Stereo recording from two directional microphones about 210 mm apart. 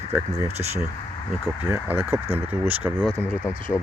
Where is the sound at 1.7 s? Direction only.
10° right (ahead or behind).